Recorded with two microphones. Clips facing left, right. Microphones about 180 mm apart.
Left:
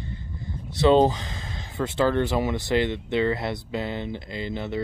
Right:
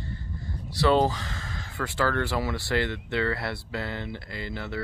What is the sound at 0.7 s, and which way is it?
Speech, 20° left (ahead or behind).